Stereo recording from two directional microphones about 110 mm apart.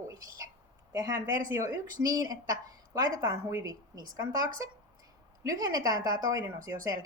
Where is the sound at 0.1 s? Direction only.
35° right (ahead or behind).